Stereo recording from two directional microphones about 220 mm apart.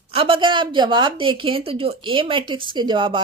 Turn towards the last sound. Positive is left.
turn(degrees=-20)  # may be behind; listen again after turning